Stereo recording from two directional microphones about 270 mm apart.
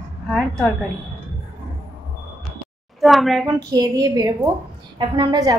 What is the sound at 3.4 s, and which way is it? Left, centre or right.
A woman's voice, centre.